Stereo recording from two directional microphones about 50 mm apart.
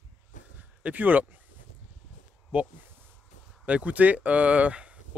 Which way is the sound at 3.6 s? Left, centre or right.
Right.